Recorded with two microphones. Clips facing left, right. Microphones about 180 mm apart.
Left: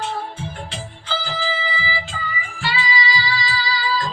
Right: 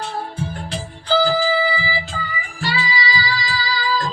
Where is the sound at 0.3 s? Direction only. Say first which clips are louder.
Right 4 dB; 40° right (ahead or behind).